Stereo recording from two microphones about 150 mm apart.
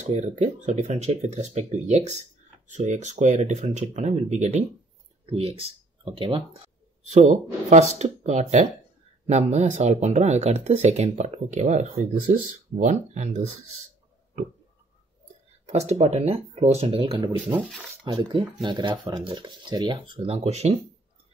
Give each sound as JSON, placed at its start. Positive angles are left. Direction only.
{"t": 0.0, "sound": "speech", "side_deg": -55}
{"t": 5.2, "sound": "speech", "side_deg": -40}
{"t": 7.1, "sound": "speech", "side_deg": -50}
{"t": 15.6, "sound": "speech", "side_deg": -45}